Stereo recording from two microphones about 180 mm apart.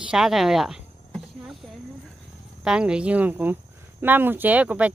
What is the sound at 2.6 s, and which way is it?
Speech, 5° right (ahead or behind).